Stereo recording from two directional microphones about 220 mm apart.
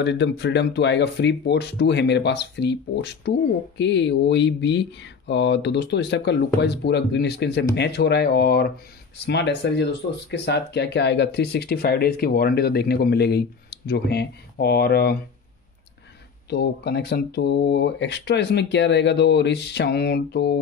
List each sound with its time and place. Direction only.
0.0 s speech: 55° left (ahead or behind)
16.4 s speech: 45° left (ahead or behind)